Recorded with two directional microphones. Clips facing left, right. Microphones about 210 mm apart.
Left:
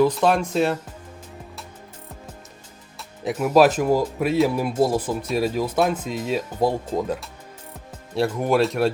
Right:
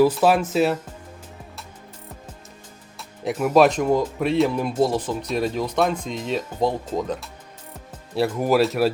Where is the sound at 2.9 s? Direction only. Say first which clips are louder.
Even; centre (ahead or behind).